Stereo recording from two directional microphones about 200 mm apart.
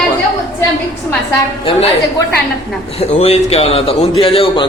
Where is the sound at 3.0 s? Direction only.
30° left (ahead or behind).